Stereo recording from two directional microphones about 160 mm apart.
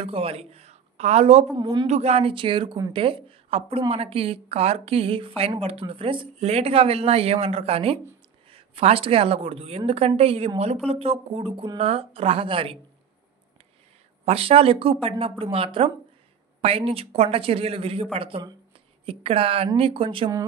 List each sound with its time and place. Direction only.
0.0 s speech: 35° right (ahead or behind)
1.6 s speech: 30° right (ahead or behind)
1.9 s a woman's voice: 40° right (ahead or behind)
14.2 s a woman's voice: 35° right (ahead or behind)